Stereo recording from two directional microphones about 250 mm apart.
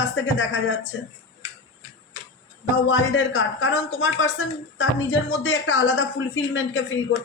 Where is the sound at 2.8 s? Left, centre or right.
Left.